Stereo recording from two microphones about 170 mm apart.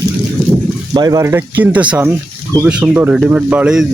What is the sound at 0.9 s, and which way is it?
Speech, 20° right (ahead or behind).